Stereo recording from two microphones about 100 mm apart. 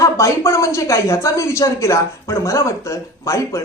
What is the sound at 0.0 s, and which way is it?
A woman's voice, 30° left (ahead or behind).